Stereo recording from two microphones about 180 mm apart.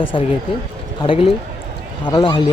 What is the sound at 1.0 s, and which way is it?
Speech, 30° left (ahead or behind).